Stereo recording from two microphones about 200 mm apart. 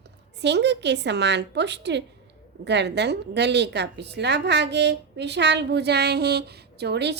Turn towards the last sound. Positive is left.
turn(degrees=-55)  # may be behind; listen again after turning